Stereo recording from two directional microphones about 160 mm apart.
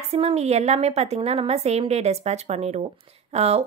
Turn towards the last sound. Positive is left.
turn(degrees=-40)  # may be behind; listen again after turning